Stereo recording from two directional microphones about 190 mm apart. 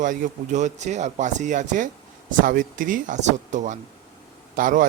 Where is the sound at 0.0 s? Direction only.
40° right (ahead or behind).